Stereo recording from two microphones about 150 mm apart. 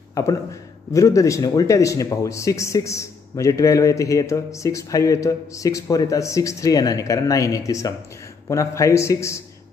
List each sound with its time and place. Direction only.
0.1 s a man's voice: 20° left (ahead or behind)